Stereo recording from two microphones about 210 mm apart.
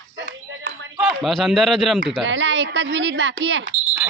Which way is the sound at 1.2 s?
Centre (ahead or behind).